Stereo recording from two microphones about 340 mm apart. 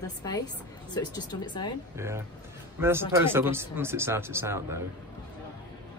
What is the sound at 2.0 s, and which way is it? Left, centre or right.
Speech, centre.